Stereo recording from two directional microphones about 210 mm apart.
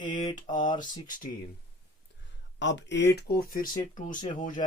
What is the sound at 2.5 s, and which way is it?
Speech, 60° left (ahead or behind).